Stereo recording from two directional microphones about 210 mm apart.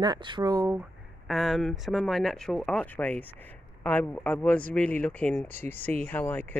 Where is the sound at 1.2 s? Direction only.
Centre (ahead or behind).